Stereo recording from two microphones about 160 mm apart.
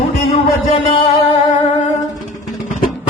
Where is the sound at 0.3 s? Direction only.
35° left (ahead or behind).